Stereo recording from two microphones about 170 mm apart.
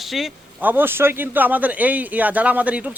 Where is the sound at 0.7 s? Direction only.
10° right (ahead or behind).